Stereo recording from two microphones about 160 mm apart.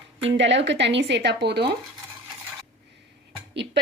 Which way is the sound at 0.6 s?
90° right.